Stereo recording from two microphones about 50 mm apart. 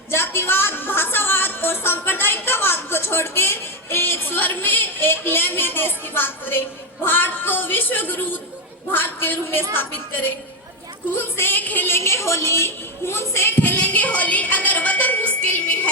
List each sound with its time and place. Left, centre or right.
0.1 s a woman's voice: left
11.9 s a woman's voice: left
13.6 s speech: left